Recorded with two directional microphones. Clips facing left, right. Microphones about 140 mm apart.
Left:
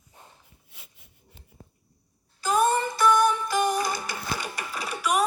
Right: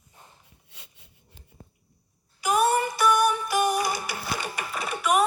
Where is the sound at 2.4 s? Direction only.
10° right (ahead or behind).